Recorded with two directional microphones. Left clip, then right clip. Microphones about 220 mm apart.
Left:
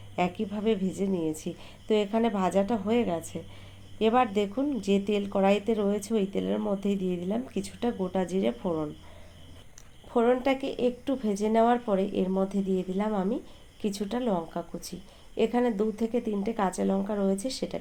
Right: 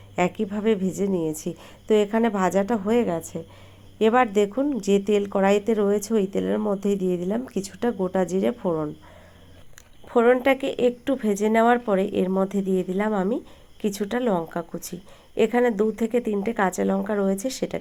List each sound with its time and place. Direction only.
0.2 s speech: 25° right (ahead or behind)
10.1 s speech: 25° right (ahead or behind)